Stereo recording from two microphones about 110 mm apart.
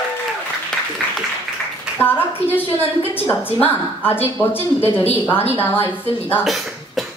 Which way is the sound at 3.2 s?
20° left (ahead or behind).